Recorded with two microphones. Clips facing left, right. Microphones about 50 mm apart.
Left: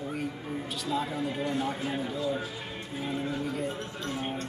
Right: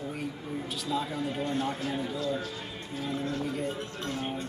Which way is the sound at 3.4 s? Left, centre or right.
Centre.